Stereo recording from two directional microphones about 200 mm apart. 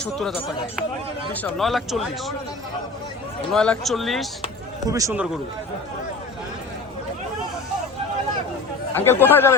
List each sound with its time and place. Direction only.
0.0 s a man's voice: centre (ahead or behind)
3.5 s a man's voice: 5° left (ahead or behind)
4.9 s speech: 15° right (ahead or behind)
9.0 s speech: 10° left (ahead or behind)